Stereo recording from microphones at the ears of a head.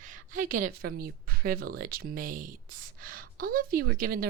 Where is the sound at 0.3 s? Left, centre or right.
Right.